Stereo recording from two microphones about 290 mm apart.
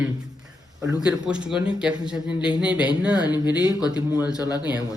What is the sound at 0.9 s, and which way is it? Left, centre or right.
Speech, centre.